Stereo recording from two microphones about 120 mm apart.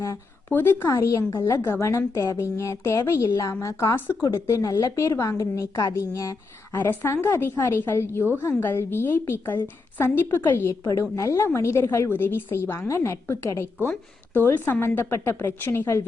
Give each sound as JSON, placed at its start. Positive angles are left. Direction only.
{"t": 0.0, "sound": "a woman's voice", "side_deg": 20}